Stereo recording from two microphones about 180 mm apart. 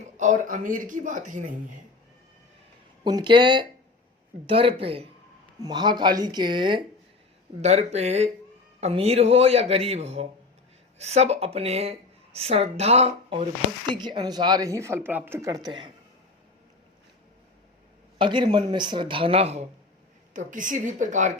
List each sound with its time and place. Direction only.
0.2 s speech: 45° right (ahead or behind)
3.0 s a woman's voice: 25° right (ahead or behind)
7.6 s speech: 40° right (ahead or behind)
13.9 s a woman's voice: 25° right (ahead or behind)
18.2 s a woman's voice: 25° right (ahead or behind)
20.3 s speech: 45° right (ahead or behind)